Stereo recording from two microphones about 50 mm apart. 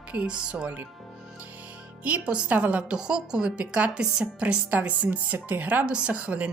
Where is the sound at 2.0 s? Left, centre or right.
Right.